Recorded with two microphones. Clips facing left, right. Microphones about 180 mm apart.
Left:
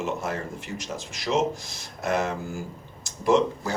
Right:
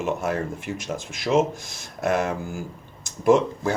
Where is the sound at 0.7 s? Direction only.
50° right (ahead or behind).